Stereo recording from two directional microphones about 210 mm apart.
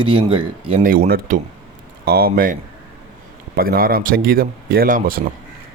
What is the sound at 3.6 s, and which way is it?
Speech, 45° right (ahead or behind).